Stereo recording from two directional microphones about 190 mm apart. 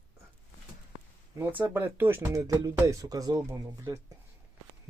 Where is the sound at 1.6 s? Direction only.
10° right (ahead or behind).